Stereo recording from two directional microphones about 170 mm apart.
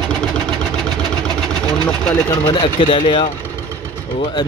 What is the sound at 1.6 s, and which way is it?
Vehicle, 5° left (ahead or behind).